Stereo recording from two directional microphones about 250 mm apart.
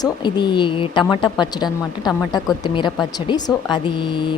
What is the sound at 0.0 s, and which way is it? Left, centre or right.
A woman's voice, centre.